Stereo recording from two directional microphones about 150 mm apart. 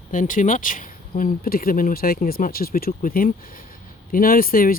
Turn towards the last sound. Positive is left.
turn(degrees=75)  # may be behind; listen again after turning